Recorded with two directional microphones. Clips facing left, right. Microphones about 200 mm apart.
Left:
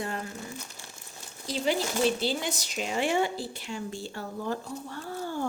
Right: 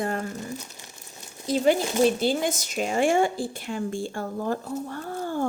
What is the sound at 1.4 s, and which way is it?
Speech, 50° right (ahead or behind).